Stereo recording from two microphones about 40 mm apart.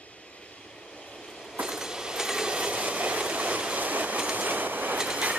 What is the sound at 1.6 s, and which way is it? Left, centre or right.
Train, centre.